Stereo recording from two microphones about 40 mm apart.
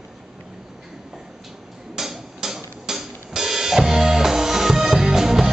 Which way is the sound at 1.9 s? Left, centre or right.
Centre.